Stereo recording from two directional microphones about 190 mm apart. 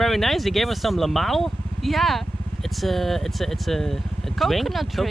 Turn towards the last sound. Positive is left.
turn(degrees=0)  # may be behind; listen again after turning